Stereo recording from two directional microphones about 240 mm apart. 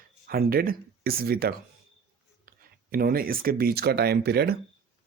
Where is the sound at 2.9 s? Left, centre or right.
Right.